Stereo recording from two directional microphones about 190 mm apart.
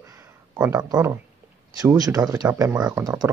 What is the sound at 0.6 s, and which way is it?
Speech, 15° right (ahead or behind).